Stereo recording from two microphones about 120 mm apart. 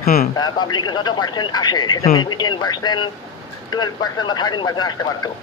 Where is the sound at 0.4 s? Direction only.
40° left (ahead or behind).